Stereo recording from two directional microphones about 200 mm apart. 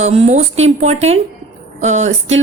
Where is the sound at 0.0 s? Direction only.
35° right (ahead or behind).